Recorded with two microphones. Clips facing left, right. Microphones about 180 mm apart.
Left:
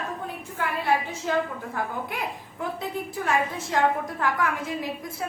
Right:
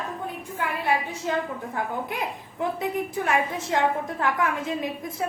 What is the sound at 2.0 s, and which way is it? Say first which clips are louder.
A woman's voice: right 1 dB; 20° right (ahead or behind).